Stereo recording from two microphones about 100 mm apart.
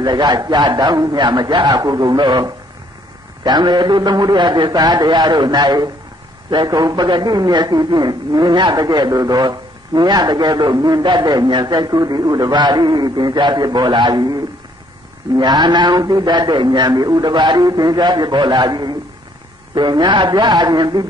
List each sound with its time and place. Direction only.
0.0 s a man's voice: 45° right (ahead or behind)